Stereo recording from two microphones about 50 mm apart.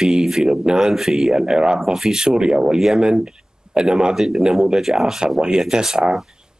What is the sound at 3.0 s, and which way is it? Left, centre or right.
Speech, centre.